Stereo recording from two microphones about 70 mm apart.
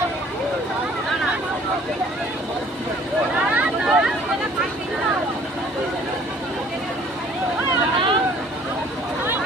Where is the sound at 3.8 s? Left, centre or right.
Centre.